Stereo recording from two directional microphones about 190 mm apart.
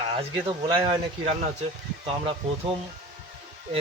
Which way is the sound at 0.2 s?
30° right (ahead or behind).